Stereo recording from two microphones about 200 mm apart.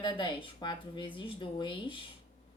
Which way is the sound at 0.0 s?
25° left (ahead or behind).